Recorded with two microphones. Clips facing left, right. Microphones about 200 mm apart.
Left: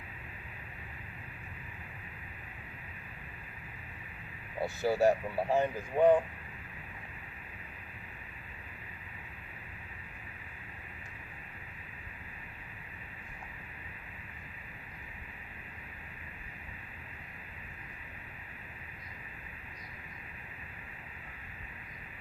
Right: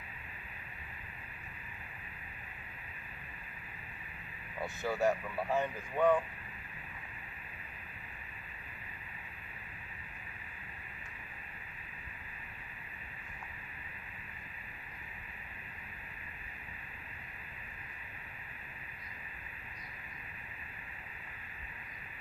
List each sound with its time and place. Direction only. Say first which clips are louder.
4.6 s speech: left 5 dB; 35° left (ahead or behind)